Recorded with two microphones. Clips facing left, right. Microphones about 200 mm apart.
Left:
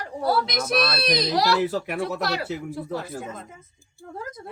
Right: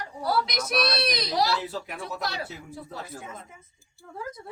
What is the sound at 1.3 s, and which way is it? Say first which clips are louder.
Speech: left 5 dB; 85° left.